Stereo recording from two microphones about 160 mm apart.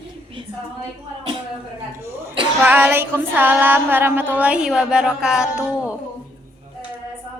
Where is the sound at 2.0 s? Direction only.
15° right (ahead or behind).